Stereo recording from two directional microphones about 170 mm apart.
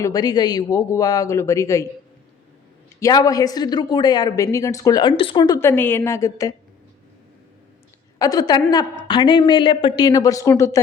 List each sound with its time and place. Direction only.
0.0 s a woman's voice: 20° left (ahead or behind)
3.0 s a woman's voice: 20° left (ahead or behind)
5.5 s a woman's voice: 15° left (ahead or behind)
8.2 s a woman's voice: 20° left (ahead or behind)